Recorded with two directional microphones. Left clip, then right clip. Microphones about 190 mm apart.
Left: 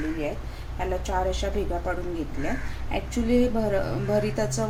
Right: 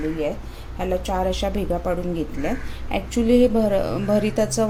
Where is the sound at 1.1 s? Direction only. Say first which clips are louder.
Right 2 dB; 45° right (ahead or behind).